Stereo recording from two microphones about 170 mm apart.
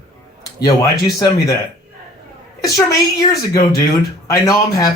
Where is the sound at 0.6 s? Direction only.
20° left (ahead or behind).